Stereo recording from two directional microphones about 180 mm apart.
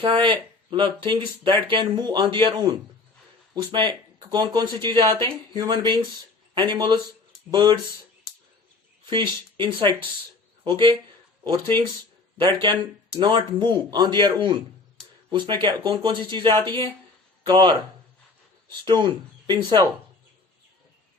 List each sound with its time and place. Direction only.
0.0 s speech: 30° right (ahead or behind)
9.0 s speech: 25° right (ahead or behind)